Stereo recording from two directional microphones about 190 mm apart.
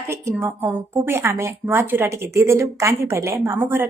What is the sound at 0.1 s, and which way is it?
Speech, 15° right (ahead or behind).